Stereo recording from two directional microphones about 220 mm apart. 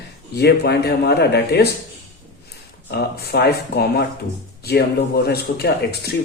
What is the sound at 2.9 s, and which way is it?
Speech, 45° left (ahead or behind).